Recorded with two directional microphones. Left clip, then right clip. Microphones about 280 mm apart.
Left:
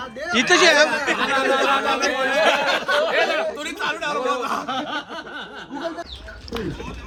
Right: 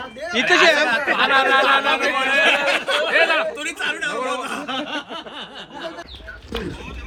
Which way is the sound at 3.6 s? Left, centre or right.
Centre.